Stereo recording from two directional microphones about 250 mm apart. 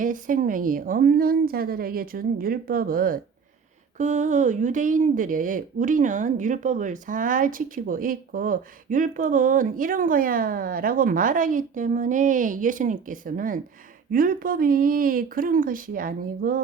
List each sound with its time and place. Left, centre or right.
0.0 s speech: right